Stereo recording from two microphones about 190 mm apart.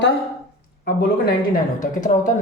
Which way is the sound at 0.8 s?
50° left (ahead or behind).